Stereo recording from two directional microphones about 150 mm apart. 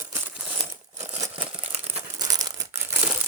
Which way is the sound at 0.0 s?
15° right (ahead or behind).